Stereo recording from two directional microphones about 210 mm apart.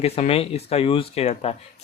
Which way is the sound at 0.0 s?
30° left (ahead or behind).